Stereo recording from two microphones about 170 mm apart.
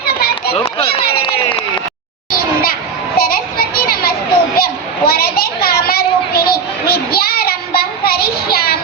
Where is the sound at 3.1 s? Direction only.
60° left (ahead or behind).